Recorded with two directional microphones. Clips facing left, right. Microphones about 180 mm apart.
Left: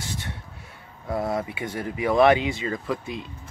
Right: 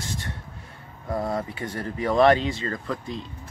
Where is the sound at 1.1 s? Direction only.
5° left (ahead or behind).